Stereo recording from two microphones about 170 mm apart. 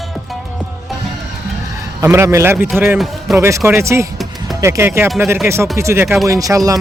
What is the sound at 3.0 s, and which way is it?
Speech, centre (ahead or behind).